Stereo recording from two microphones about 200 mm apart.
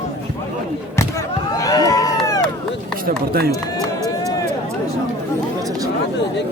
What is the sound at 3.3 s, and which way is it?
Speech, 50° right (ahead or behind).